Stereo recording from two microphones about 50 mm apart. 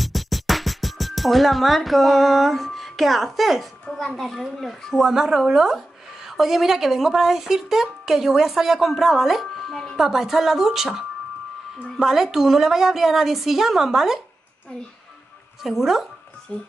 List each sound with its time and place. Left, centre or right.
0.0 s music: centre
3.9 s a woman's voice: centre
4.2 s a woman's voice: centre
15.6 s speech: centre
16.5 s speech: left